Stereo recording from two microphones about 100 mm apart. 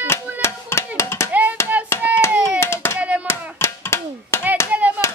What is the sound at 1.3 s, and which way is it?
Hands, 15° right (ahead or behind).